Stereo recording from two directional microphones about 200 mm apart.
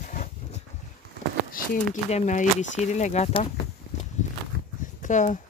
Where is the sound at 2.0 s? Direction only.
35° left (ahead or behind).